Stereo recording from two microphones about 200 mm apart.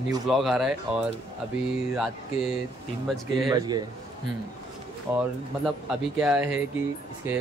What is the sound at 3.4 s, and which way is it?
Speech, 20° right (ahead or behind).